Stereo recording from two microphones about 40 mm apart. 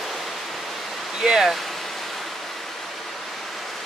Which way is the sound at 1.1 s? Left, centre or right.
Centre.